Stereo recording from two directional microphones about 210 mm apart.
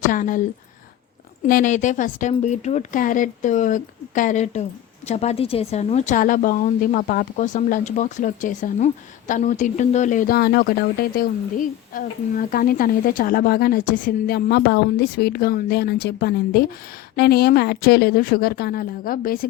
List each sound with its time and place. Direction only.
0.1 s a woman's voice: 40° left (ahead or behind)
1.5 s a woman's voice: 40° left (ahead or behind)